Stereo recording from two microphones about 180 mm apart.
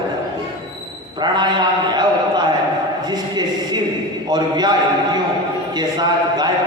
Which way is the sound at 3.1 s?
20° right (ahead or behind).